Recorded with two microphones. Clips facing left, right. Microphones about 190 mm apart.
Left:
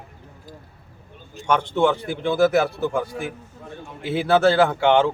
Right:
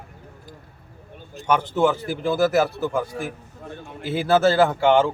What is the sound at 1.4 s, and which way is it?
A man's voice, 5° right (ahead or behind).